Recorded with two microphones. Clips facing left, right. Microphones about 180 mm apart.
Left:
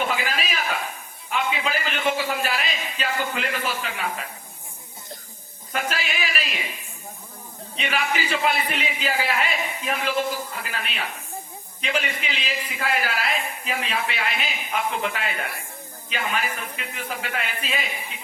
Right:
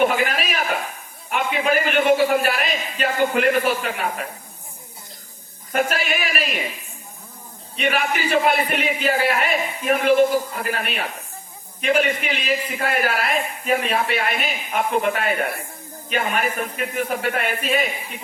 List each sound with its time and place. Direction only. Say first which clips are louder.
0.0 s a sound: right 7 dB; 50° right (ahead or behind)
1.3 s a man's voice: right 5 dB; 50° right (ahead or behind)
5.7 s a man's voice: right 6 dB; 50° right (ahead or behind)
7.8 s a man's voice: right 4 dB; 50° right (ahead or behind)